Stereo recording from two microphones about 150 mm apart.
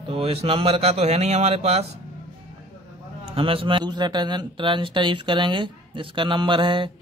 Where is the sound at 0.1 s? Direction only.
40° right (ahead or behind).